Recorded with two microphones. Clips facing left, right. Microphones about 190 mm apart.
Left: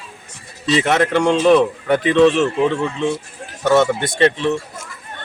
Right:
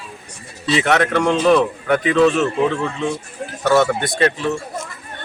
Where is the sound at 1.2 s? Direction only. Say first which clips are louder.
Left 2 dB; 15° left (ahead or behind).